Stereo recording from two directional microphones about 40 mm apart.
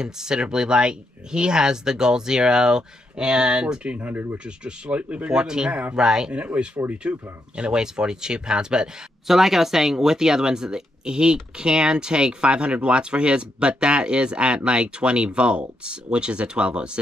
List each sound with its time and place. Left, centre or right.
0.0 s speech: centre
4.1 s speech: right
4.5 s speech: right
5.3 s speech: centre
5.7 s speech: right
5.9 s speech: centre
6.3 s speech: right
9.3 s speech: centre; by 17.0 s right